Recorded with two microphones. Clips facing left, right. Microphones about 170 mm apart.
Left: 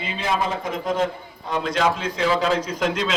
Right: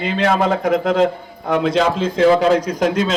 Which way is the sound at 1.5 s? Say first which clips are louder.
Right 6 dB; 55° right (ahead or behind).